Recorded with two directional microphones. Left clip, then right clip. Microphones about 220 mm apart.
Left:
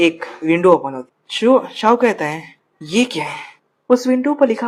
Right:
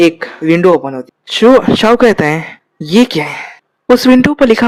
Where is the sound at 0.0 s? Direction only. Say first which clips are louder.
Right 6 dB; 50° right (ahead or behind).